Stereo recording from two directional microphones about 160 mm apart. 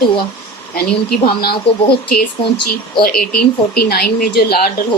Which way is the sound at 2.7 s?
70° left (ahead or behind).